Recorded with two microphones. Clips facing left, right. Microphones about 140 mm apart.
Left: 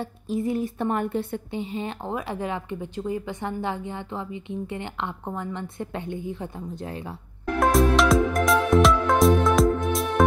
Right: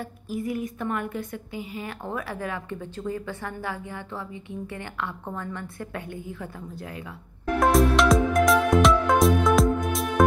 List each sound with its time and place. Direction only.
0.0 s a woman's voice: 25° left (ahead or behind)
7.6 s music: centre (ahead or behind)